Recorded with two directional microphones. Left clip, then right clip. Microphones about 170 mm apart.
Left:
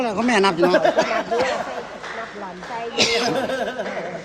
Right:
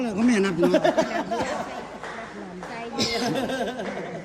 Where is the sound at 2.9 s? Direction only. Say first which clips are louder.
Left 6 dB; 10° left (ahead or behind).